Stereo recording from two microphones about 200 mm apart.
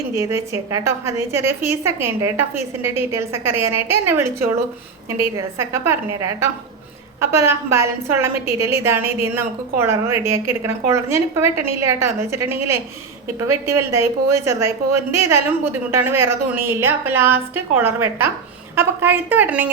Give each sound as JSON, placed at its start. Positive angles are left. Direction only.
{"t": 0.2, "sound": "a woman's voice", "side_deg": -15}